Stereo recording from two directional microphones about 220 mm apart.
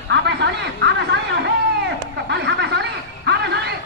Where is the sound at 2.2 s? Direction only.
50° right (ahead or behind).